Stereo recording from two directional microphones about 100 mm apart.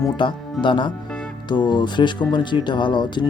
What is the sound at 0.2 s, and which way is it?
Speech, 55° left (ahead or behind).